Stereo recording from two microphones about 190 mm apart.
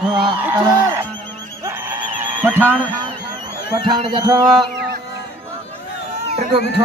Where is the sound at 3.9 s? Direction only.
25° right (ahead or behind).